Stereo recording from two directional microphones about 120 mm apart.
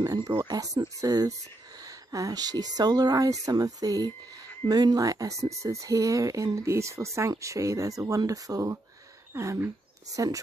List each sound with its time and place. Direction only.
0.0 s speech: 35° right (ahead or behind)